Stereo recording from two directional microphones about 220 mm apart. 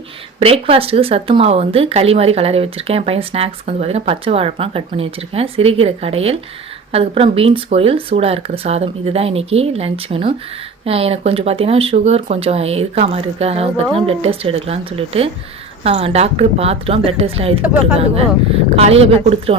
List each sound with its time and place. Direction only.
0.3 s speech: 25° right (ahead or behind)
18.9 s speech: 25° right (ahead or behind)